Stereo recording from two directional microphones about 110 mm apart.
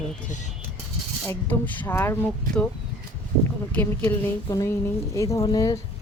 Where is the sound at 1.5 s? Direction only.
15° left (ahead or behind).